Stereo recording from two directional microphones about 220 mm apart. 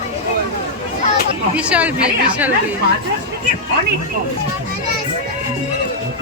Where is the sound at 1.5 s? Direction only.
5° right (ahead or behind).